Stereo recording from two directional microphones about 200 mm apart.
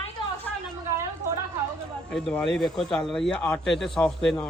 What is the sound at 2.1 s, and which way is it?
Speech, 5° left (ahead or behind).